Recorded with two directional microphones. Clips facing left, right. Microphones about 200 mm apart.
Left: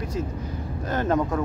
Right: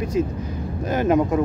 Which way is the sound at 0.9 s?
15° right (ahead or behind).